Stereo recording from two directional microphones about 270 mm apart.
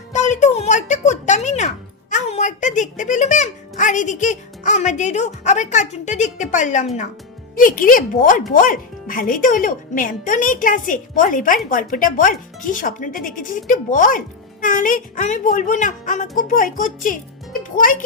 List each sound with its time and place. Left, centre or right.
0.1 s a child's voice: left